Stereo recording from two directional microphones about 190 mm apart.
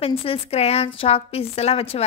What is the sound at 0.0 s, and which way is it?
A woman's voice, 30° left (ahead or behind).